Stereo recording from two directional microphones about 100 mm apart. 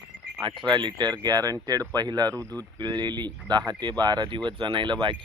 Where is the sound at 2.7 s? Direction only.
45° right (ahead or behind).